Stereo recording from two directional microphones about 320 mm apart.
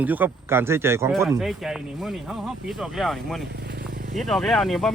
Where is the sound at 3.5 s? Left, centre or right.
Right.